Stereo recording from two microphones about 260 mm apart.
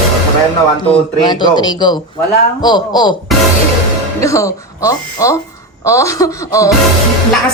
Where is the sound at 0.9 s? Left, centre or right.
Centre.